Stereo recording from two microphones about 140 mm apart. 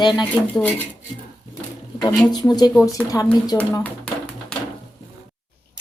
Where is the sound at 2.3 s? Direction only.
30° left (ahead or behind).